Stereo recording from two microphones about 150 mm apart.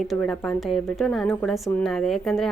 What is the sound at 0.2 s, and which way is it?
Speech, 5° left (ahead or behind).